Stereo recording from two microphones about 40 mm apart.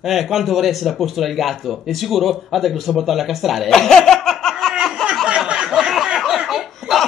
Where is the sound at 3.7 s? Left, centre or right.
Centre.